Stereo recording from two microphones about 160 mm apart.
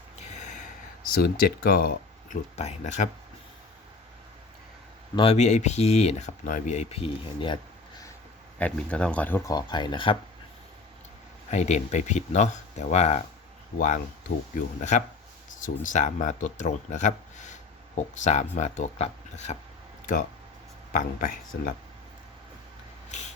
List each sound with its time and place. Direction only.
0.2 s gasp: 50° left (ahead or behind)
1.1 s speech: 65° left (ahead or behind)
2.6 s speech: 45° left (ahead or behind)
5.1 s speech: 35° left (ahead or behind)
8.5 s speech: 10° left (ahead or behind); by 10.2 s 30° left (ahead or behind)
11.5 s speech: 45° left (ahead or behind)
14.5 s speech: 50° left (ahead or behind)
20.9 s speech: 55° left (ahead or behind)